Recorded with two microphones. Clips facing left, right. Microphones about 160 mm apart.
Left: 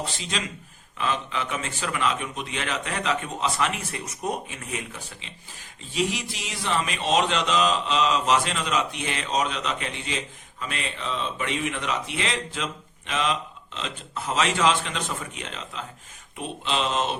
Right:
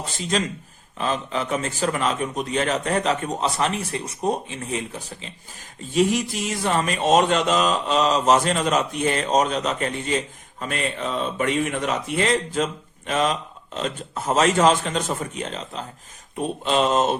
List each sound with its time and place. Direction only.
0.0 s a man's voice: 45° right (ahead or behind)
5.8 s speech: 45° right (ahead or behind)